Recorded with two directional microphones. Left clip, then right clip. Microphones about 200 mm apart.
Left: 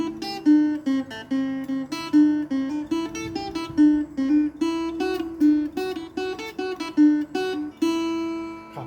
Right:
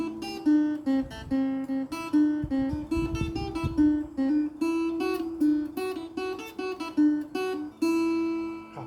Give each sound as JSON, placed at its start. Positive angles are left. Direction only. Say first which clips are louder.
{"t": 0.0, "sound": "music", "louder": "left 5 dB", "side_deg": 25}